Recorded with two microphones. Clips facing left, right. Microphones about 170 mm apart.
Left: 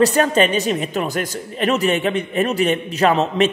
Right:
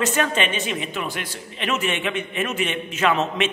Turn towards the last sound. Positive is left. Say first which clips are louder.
# left 5 dB
turn(degrees=35)  # may be behind; listen again after turning